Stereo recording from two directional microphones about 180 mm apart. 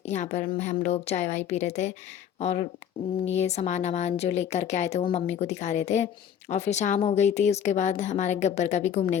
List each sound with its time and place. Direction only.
0.0 s speech: 40° left (ahead or behind)